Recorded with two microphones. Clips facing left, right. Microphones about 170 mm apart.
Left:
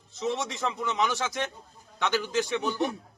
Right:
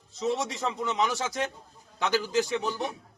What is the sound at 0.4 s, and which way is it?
Speech, 30° right (ahead or behind).